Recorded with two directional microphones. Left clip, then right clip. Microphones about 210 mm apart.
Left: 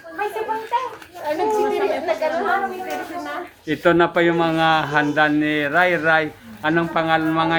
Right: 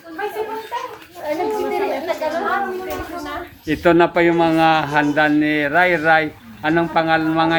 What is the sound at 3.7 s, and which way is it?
A man's voice, 15° right (ahead or behind).